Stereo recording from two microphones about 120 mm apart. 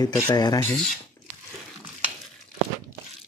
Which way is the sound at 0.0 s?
35° left (ahead or behind).